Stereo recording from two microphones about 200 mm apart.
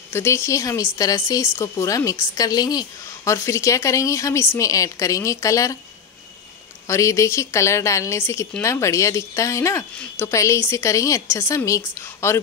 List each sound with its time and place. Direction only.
0.1 s a woman's voice: 15° left (ahead or behind)
6.9 s a woman's voice: 15° left (ahead or behind)